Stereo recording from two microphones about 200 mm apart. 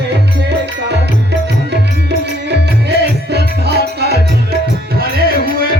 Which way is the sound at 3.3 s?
55° right (ahead or behind).